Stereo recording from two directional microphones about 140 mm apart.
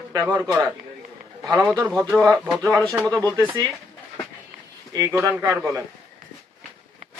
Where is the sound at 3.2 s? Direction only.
30° right (ahead or behind).